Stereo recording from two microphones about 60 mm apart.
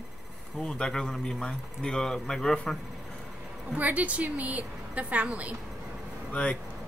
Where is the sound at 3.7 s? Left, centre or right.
Right.